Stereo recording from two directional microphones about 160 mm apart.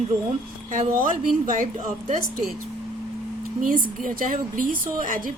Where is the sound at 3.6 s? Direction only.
55° right (ahead or behind).